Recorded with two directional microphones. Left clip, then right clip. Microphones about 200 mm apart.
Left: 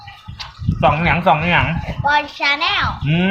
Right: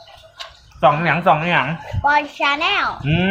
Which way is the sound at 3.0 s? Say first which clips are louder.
Even; centre (ahead or behind).